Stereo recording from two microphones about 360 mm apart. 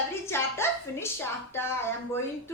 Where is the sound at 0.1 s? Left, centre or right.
Centre.